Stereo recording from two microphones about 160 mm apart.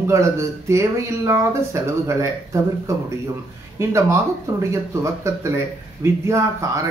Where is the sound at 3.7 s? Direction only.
20° right (ahead or behind).